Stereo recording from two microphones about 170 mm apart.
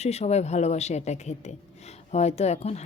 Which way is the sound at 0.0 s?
40° left (ahead or behind).